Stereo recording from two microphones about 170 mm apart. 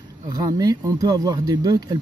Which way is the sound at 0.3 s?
20° right (ahead or behind).